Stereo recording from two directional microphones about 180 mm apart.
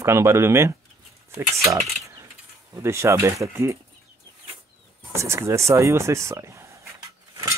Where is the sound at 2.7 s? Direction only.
15° right (ahead or behind).